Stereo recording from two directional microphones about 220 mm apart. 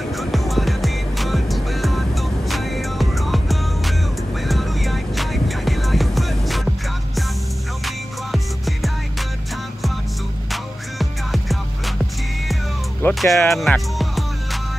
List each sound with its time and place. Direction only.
0.1 s music: centre (ahead or behind)
7.8 s music: centre (ahead or behind)
10.5 s music: centre (ahead or behind)
13.0 s speech: centre (ahead or behind)
13.5 s music: centre (ahead or behind)